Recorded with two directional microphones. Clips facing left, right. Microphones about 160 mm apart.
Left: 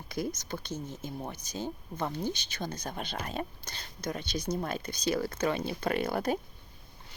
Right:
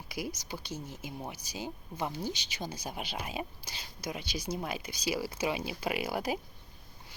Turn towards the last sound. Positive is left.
turn(degrees=-5)  # may be behind; listen again after turning